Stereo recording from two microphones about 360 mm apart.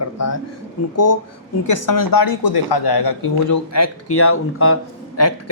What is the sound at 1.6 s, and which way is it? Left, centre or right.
Speech, left.